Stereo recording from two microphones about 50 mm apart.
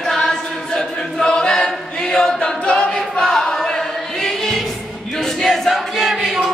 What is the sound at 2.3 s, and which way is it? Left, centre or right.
A capella, centre.